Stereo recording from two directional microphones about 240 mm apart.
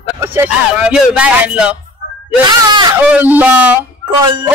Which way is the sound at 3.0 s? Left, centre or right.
Centre.